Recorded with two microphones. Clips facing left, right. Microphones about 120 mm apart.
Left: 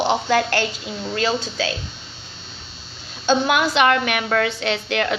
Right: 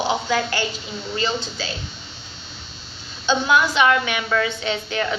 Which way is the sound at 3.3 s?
65° left (ahead or behind).